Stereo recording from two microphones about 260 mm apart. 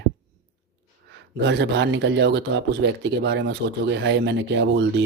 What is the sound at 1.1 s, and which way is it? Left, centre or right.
A man's voice, right.